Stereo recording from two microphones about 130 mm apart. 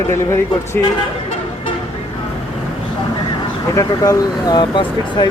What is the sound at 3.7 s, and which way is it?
Speech, 25° left (ahead or behind).